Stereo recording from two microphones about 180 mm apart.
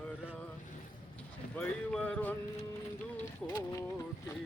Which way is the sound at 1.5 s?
10° left (ahead or behind).